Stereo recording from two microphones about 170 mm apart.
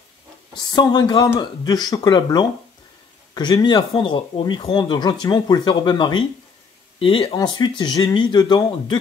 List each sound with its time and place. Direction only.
0.6 s speech: 25° left (ahead or behind)